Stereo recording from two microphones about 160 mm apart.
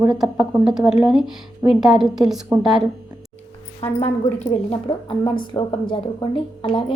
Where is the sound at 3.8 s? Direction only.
40° left (ahead or behind).